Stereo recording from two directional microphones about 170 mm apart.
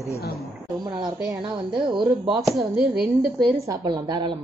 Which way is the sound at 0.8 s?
25° right (ahead or behind).